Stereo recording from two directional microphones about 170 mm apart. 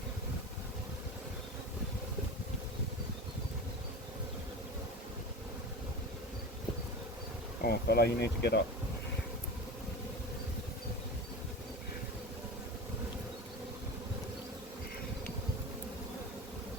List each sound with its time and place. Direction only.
7.6 s speech: 70° left (ahead or behind)